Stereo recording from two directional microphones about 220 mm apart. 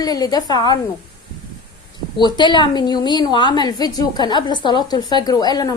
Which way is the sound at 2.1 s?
20° left (ahead or behind).